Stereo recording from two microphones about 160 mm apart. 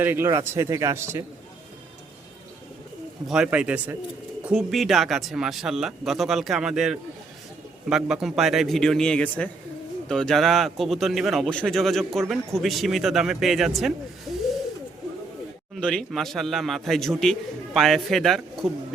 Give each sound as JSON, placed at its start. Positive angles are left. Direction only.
{"t": 0.0, "sound": "speech", "side_deg": -15}
{"t": 3.2, "sound": "speech", "side_deg": -5}
{"t": 15.7, "sound": "speech", "side_deg": 5}